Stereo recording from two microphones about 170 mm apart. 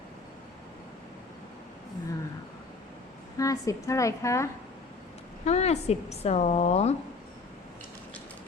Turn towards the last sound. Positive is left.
turn(degrees=40)  # may be behind; listen again after turning